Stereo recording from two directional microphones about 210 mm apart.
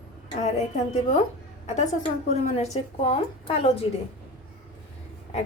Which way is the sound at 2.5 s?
30° left (ahead or behind).